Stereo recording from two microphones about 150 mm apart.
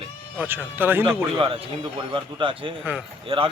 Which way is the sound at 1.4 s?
40° right (ahead or behind).